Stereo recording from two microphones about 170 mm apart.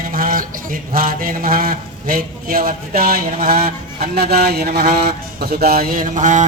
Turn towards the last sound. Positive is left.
turn(degrees=-45)  # may be behind; listen again after turning